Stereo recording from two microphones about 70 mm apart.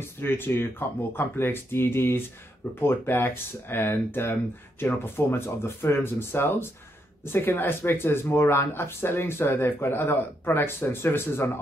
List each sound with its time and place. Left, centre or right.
0.2 s speech: left